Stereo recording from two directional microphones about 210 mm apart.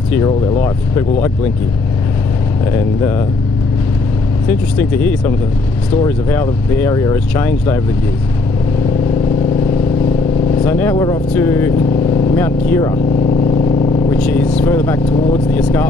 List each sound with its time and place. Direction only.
0.1 s speech: 15° left (ahead or behind)
4.5 s speech: 10° left (ahead or behind)
10.6 s speech: 10° left (ahead or behind)
12.9 s vehicle: 25° left (ahead or behind)
14.1 s speech: 5° left (ahead or behind)